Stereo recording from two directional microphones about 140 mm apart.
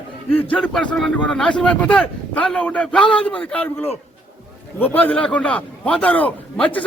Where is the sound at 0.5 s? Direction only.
10° left (ahead or behind).